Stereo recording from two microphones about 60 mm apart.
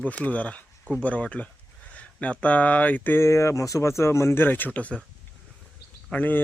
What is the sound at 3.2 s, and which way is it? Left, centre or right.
Speech, left.